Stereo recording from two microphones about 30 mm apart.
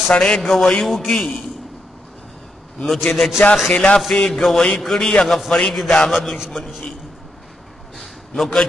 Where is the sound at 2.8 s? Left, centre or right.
Centre.